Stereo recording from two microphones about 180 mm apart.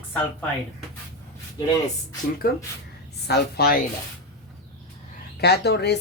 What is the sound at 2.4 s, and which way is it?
A woman's voice, 60° left (ahead or behind).